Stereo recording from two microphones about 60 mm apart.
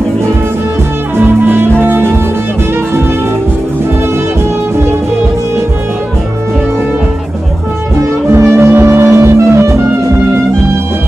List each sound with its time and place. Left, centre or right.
1.1 s music: right
8.3 s music: right